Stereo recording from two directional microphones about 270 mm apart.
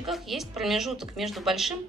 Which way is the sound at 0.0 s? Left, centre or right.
Centre.